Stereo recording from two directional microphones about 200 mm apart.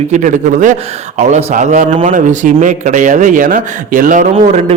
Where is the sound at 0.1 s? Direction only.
40° right (ahead or behind).